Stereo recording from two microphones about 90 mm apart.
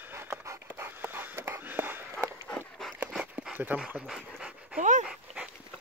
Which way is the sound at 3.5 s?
20° right (ahead or behind).